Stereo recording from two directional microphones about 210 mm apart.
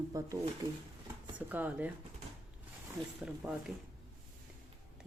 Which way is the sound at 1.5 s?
10° right (ahead or behind).